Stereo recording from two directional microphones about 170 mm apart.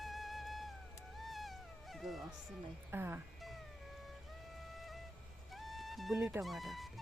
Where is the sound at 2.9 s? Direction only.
15° right (ahead or behind).